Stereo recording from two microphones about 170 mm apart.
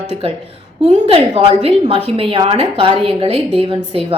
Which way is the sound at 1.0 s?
30° right (ahead or behind).